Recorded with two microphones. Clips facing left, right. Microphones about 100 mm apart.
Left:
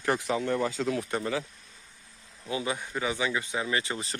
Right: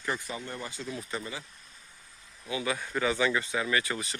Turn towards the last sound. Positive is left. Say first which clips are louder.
# even
turn(degrees=25)  # may be behind; listen again after turning